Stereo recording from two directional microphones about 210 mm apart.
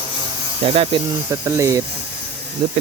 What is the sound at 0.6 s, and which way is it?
Speech, 25° right (ahead or behind).